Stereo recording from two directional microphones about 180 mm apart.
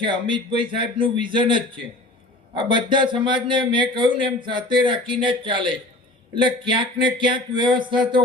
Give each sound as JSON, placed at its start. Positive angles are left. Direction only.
{"t": 0.0, "sound": "speech", "side_deg": -25}